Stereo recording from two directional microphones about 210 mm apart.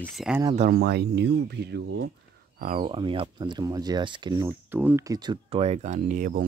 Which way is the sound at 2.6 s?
30° right (ahead or behind).